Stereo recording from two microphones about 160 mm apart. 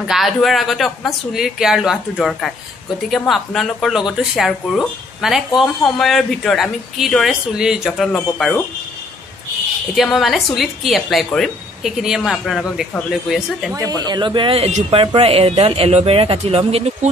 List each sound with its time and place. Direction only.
0.0 s a woman's voice: centre (ahead or behind)
9.9 s a woman's voice: centre (ahead or behind)
14.0 s speech: 25° right (ahead or behind)